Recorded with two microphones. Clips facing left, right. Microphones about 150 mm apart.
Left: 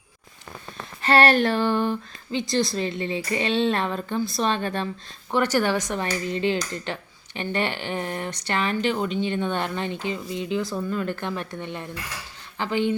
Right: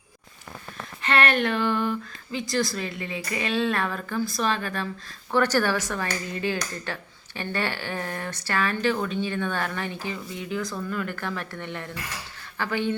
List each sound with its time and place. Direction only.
1.0 s female singing: 35° left (ahead or behind)
2.5 s speech: 25° left (ahead or behind)
5.3 s a woman's voice: 15° left (ahead or behind)